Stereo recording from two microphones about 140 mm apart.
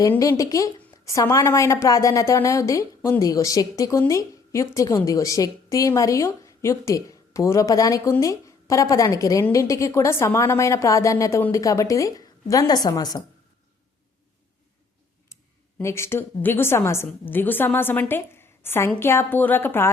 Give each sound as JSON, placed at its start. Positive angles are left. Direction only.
{"t": 0.2, "sound": "speech", "side_deg": 25}
{"t": 15.3, "sound": "clicking", "side_deg": 20}
{"t": 15.8, "sound": "a woman's voice", "side_deg": 20}